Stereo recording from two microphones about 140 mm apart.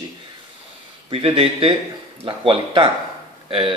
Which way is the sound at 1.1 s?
45° right (ahead or behind).